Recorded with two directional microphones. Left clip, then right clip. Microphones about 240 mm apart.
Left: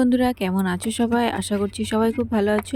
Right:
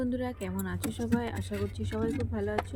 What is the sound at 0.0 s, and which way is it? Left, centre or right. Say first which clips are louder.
Speech: left 13 dB; left.